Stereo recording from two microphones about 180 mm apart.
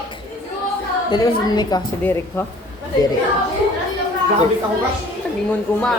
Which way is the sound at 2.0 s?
10° left (ahead or behind).